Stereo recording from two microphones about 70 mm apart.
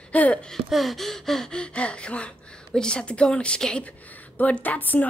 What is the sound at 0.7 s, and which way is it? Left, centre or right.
A woman's voice, centre.